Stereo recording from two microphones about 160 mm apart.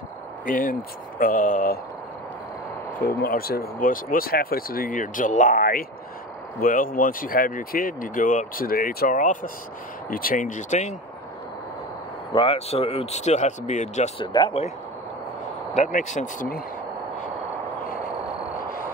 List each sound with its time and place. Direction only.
0.5 s speech: 60° left (ahead or behind)
3.1 s speech: 70° left (ahead or behind); by 11.0 s 50° left (ahead or behind)
12.3 s speech: 35° left (ahead or behind)
14.2 s speech: 30° left (ahead or behind)
15.7 s speech: 50° left (ahead or behind)